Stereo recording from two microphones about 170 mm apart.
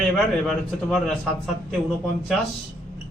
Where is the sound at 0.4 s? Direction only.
Centre (ahead or behind).